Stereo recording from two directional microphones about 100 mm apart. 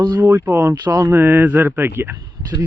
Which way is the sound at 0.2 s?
25° right (ahead or behind).